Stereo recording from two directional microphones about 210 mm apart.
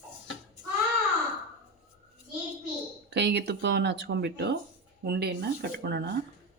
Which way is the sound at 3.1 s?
55° right (ahead or behind).